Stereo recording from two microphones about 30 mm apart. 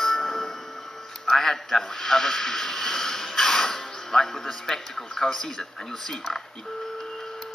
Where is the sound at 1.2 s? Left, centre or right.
Centre.